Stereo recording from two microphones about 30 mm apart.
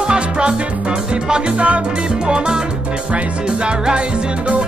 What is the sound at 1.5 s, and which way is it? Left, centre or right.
Music, right.